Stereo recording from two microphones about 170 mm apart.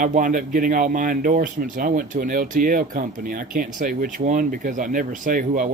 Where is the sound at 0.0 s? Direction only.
50° right (ahead or behind).